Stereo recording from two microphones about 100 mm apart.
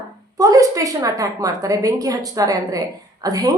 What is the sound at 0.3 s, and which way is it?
A woman's voice, 35° right (ahead or behind).